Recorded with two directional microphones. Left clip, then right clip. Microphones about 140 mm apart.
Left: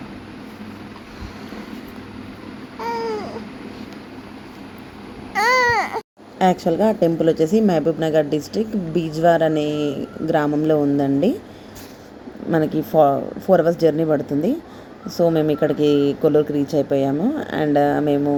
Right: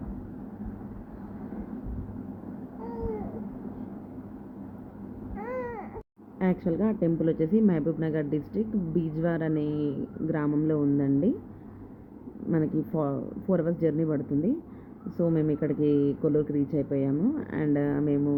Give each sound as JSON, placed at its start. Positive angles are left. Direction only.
{"t": 5.4, "sound": "baby cry", "side_deg": 90}
{"t": 6.4, "sound": "speech", "side_deg": 20}
{"t": 12.5, "sound": "speech", "side_deg": 15}